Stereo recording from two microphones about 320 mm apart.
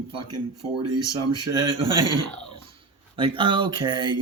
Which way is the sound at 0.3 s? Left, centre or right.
Right.